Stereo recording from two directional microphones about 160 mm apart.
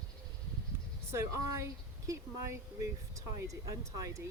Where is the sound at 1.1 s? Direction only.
15° right (ahead or behind).